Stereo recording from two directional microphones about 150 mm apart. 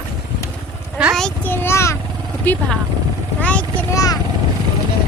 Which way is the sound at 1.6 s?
20° left (ahead or behind).